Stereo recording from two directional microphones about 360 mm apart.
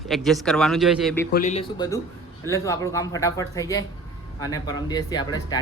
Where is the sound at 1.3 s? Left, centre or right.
Left.